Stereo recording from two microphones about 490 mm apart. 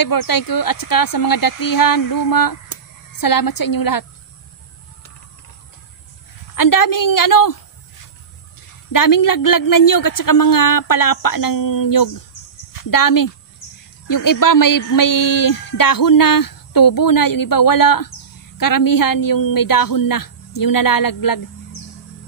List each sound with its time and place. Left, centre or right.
0.0 s speech: left
6.5 s speech: left
8.9 s speech: left